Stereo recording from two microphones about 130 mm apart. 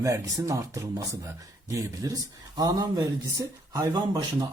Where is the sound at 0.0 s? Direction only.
25° right (ahead or behind).